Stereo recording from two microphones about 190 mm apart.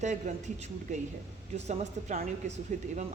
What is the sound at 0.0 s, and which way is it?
A woman's voice, 40° right (ahead or behind).